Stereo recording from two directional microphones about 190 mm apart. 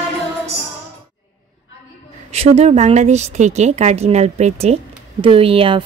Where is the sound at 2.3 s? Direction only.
35° right (ahead or behind).